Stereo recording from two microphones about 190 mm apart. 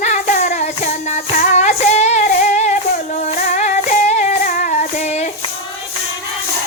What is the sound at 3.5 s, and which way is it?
Music, 40° left (ahead or behind).